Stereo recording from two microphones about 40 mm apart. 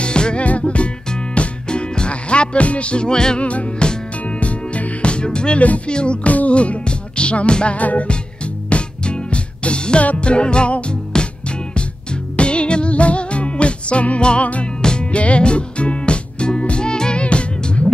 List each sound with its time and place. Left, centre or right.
0.0 s music: left
3.3 s music: left
6.2 s music: left
7.8 s music: left
8.6 s music: left
14.8 s music: centre
15.0 s music: left